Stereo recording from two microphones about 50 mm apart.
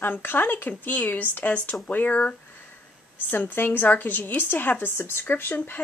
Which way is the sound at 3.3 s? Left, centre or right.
Left.